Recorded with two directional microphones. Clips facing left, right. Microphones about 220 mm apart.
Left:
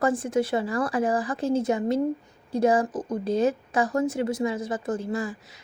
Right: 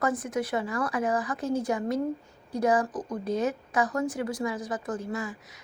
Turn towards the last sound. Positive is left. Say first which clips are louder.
# left 4 dB
turn(degrees=30)  # may be behind; listen again after turning